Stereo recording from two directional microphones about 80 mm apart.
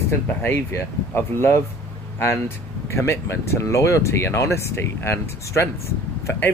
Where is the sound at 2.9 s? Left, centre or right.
Left.